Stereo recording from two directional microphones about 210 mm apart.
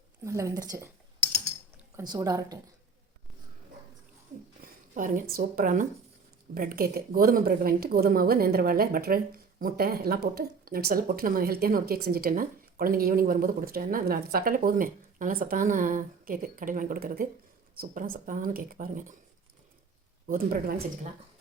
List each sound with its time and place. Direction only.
0.3 s speech: 15° right (ahead or behind)
2.0 s speech: 15° right (ahead or behind)
4.6 s a sound: 40° right (ahead or behind)
5.3 s speech: 45° right (ahead or behind)
20.2 s speech: 40° right (ahead or behind)